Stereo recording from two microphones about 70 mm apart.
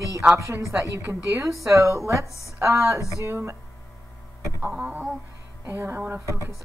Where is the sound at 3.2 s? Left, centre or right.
Right.